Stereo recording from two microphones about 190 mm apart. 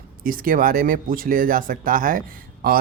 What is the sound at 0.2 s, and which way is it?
Speech, 50° right (ahead or behind).